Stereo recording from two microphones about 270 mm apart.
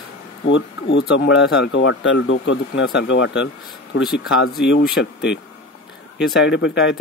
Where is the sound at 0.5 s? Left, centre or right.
Left.